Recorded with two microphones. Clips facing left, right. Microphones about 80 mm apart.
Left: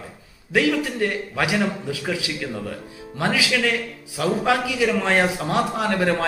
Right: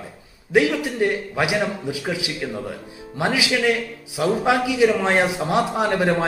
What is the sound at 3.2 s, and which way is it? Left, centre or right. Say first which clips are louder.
A man's voice: right 1 dB; centre.